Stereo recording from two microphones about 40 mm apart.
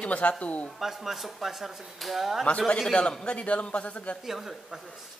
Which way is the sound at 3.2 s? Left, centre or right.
Left.